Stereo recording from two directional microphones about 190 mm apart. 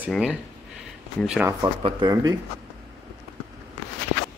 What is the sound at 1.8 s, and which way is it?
Speech, 25° right (ahead or behind).